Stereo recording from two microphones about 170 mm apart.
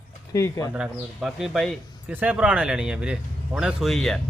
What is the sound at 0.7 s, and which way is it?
Speech, 5° right (ahead or behind).